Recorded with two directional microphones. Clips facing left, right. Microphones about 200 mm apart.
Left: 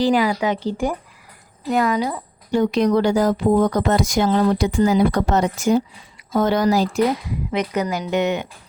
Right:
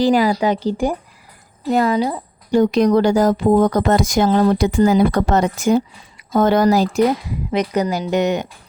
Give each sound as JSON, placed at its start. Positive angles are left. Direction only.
{"t": 0.0, "sound": "speech", "side_deg": -40}
{"t": 2.5, "sound": "speech", "side_deg": -45}
{"t": 7.5, "sound": "speech", "side_deg": -35}